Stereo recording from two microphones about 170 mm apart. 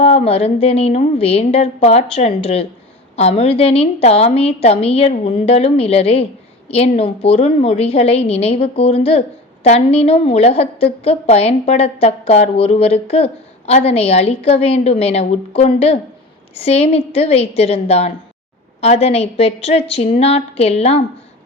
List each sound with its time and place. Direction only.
0.0 s a woman's voice: 35° left (ahead or behind)